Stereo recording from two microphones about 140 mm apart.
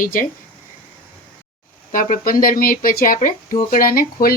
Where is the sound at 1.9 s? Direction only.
75° left (ahead or behind).